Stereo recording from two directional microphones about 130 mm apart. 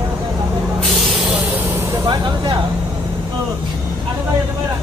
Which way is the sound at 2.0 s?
35° right (ahead or behind).